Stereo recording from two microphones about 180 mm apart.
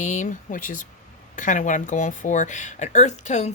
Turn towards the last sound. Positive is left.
turn(degrees=40)  # may be behind; listen again after turning